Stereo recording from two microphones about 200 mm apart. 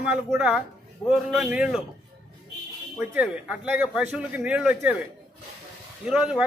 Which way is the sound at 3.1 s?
5° right (ahead or behind).